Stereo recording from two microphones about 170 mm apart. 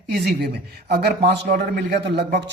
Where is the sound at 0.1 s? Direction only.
70° right (ahead or behind).